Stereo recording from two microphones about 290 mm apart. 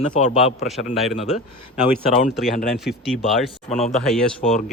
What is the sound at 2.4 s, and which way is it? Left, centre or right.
Speech, left.